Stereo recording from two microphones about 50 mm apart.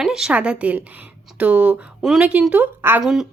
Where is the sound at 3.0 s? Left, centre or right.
Centre.